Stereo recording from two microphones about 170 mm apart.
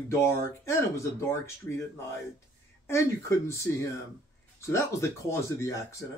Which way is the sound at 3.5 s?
15° left (ahead or behind).